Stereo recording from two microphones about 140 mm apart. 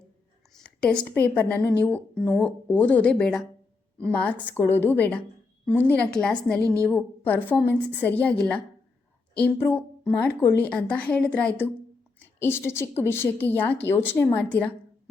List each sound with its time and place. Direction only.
1.4 s a woman's voice: 10° left (ahead or behind)